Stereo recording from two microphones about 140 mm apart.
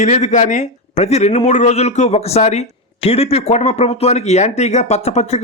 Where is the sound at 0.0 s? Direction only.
55° left (ahead or behind).